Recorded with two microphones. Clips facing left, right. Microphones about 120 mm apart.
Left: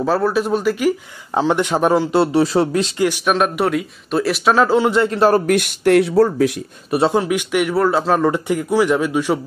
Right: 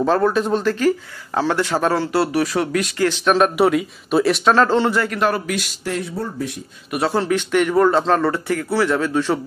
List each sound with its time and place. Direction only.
0.0 s speech: 5° left (ahead or behind); by 3.1 s 25° left (ahead or behind)
3.1 s speech: 5° left (ahead or behind)
4.9 s a man's voice: 25° left (ahead or behind)
5.3 s speech: 55° left (ahead or behind); by 6.6 s 90° left
6.9 s a man's voice: 25° left (ahead or behind)
7.2 s speech: 10° left (ahead or behind)